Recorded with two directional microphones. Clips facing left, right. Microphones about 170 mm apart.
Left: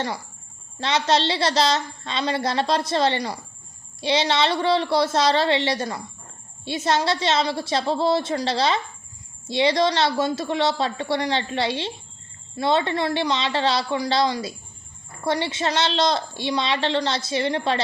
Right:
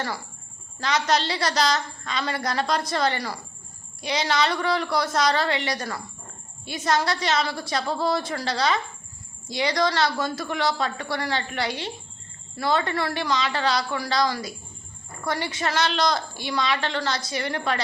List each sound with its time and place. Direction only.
0.8 s a woman's voice: 30° left (ahead or behind)